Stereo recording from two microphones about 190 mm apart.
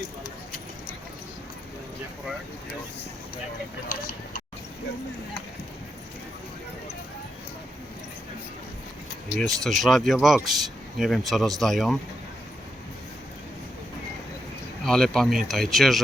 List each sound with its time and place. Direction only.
3.9 s speech: 40° left (ahead or behind)
9.4 s speech: centre (ahead or behind)
14.8 s speech: centre (ahead or behind)